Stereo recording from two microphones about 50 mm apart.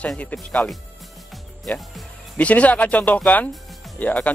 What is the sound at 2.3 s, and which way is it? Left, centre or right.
Speech, left.